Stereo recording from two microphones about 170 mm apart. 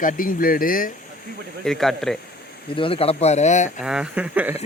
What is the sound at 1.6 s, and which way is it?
Speech, centre (ahead or behind).